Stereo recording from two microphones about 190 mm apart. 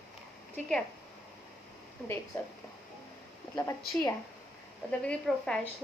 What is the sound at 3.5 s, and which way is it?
Speech, 15° left (ahead or behind).